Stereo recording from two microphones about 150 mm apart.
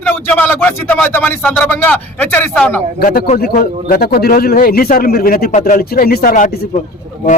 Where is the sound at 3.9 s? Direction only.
80° left; by 6.8 s 55° left (ahead or behind).